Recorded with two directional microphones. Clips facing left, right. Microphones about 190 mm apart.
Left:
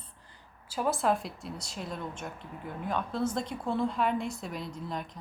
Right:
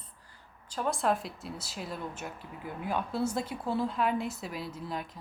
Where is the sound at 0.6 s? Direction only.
5° left (ahead or behind).